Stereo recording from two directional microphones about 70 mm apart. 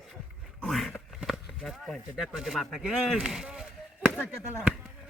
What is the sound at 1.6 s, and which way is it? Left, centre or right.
Speech, centre.